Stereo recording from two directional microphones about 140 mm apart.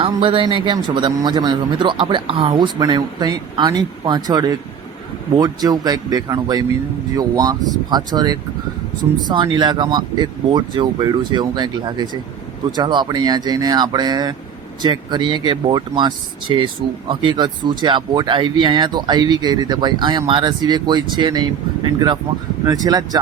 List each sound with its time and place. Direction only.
0.0 s a man's voice: 40° right (ahead or behind)